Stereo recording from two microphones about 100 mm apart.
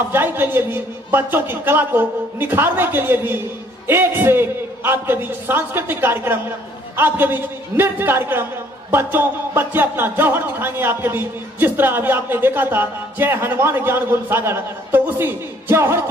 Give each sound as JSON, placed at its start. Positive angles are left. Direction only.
{"t": 0.1, "sound": "speech", "side_deg": -20}